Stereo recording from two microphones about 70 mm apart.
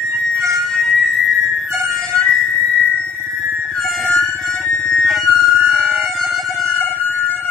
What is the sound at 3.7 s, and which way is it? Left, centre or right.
Music, centre.